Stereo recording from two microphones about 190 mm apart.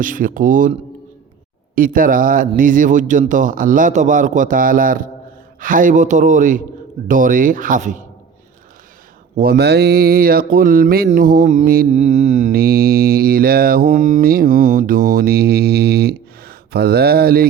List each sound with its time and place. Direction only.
0.0 s mantra: 45° right (ahead or behind)
9.3 s mantra: 50° right (ahead or behind)
12.5 s mantra: 55° right (ahead or behind)